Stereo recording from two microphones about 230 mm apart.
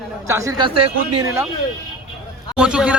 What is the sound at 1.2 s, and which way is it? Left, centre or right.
Speech, centre.